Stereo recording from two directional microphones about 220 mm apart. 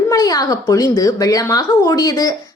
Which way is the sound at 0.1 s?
15° left (ahead or behind).